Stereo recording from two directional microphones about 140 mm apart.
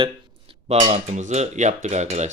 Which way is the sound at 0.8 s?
55° right (ahead or behind).